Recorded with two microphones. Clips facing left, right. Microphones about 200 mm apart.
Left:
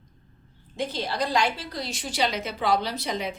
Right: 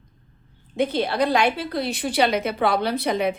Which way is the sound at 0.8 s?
60° right (ahead or behind).